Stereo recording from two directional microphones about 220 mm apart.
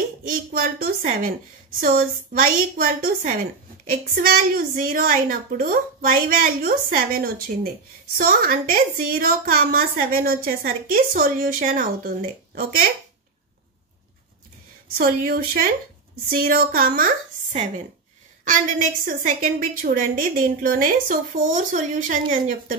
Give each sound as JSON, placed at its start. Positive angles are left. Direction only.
{"t": 0.3, "sound": "a woman's voice", "side_deg": -40}
{"t": 15.0, "sound": "a woman's voice", "side_deg": -40}